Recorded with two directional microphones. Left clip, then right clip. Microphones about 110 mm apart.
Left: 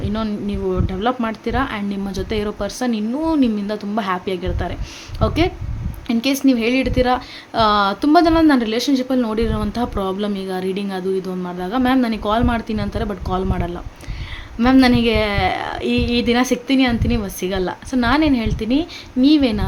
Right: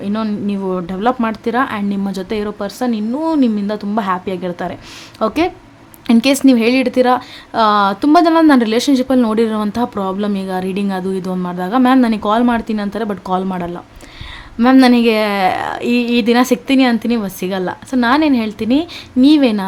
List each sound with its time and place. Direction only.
0.0 s a woman's voice: 40° right (ahead or behind)
6.1 s a woman's voice: 65° right (ahead or behind); by 19.6 s 45° right (ahead or behind)